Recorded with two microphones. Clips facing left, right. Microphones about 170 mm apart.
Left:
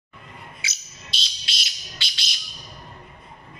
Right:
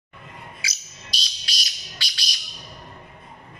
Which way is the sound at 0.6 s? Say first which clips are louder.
Right 1 dB; 25° left (ahead or behind).